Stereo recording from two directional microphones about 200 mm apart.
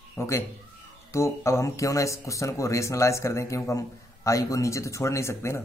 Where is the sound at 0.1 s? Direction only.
15° left (ahead or behind).